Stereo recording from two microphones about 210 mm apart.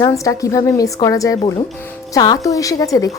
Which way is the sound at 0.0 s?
15° left (ahead or behind).